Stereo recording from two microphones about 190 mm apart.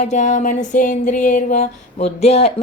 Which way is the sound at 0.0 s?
40° left (ahead or behind).